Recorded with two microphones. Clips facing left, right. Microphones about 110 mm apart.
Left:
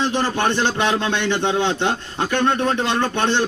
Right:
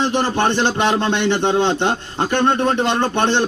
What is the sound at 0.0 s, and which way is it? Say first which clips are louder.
A man's voice: right 2 dB; 25° right (ahead or behind).